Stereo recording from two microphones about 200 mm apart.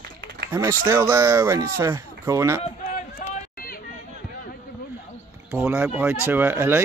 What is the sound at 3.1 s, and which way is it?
Run, 45° left (ahead or behind).